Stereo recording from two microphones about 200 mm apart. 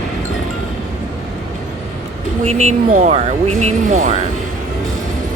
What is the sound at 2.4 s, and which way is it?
Speech, 35° right (ahead or behind).